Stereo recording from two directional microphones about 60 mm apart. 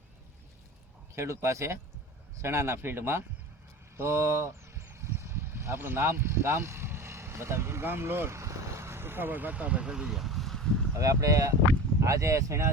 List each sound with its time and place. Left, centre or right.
1.1 s speech: right
4.9 s a sound: right; by 10.8 s centre
10.9 s speech: right